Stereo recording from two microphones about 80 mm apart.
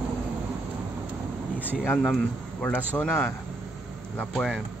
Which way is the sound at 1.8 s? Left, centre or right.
Left.